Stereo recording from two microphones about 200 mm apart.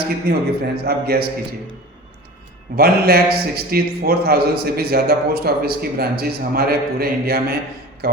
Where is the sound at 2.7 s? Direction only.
50° right (ahead or behind).